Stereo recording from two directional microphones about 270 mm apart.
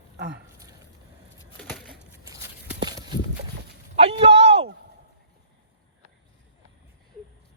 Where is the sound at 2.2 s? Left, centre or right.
Centre.